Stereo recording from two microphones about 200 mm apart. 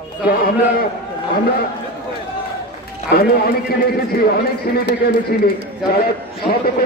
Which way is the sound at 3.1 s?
50° left (ahead or behind).